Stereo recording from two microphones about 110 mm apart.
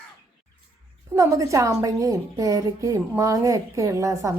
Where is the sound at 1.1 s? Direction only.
25° right (ahead or behind).